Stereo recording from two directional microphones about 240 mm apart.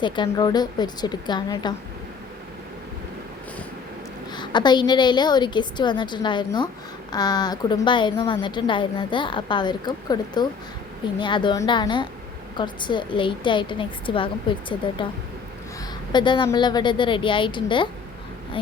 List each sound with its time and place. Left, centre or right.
0.0 s a woman's voice: centre
4.4 s a woman's voice: centre